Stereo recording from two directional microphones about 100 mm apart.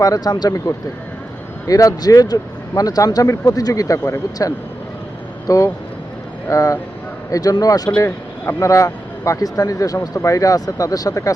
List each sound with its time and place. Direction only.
0.0 s speech: 40° left (ahead or behind)
8.0 s speech: 25° left (ahead or behind)